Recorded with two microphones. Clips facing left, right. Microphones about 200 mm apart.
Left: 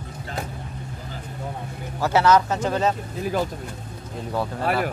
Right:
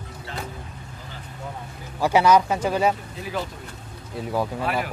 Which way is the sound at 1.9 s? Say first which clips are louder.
Right 1 dB; 15° right (ahead or behind).